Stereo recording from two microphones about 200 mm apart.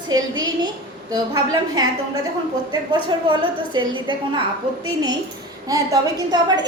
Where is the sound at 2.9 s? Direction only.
25° right (ahead or behind).